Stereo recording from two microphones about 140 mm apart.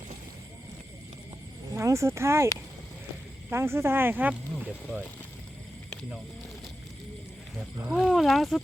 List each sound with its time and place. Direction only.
1.7 s speech: 20° right (ahead or behind)
3.5 s speech: 20° right (ahead or behind)
7.9 s speech: centre (ahead or behind)